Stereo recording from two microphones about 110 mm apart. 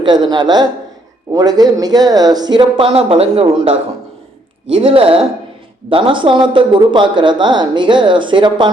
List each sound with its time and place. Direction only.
0.0 s speech: 45° right (ahead or behind)